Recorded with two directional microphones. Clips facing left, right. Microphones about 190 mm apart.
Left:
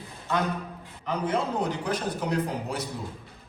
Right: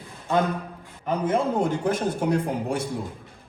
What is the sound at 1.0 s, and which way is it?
A man's voice, 50° right (ahead or behind).